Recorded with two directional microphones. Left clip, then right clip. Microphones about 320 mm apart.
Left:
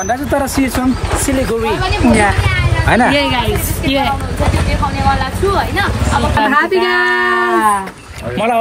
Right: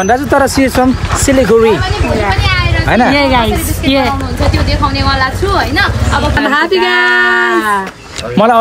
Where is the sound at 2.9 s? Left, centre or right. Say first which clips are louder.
Right 3 dB; centre.